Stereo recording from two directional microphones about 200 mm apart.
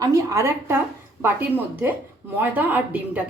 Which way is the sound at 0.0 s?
15° right (ahead or behind).